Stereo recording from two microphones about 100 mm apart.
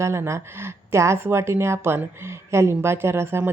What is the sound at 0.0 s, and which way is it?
Speech, 30° right (ahead or behind).